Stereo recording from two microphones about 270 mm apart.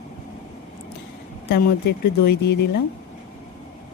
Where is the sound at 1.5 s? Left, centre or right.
Left.